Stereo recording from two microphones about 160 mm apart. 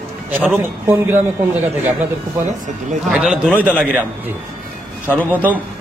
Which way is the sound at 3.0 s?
5° right (ahead or behind).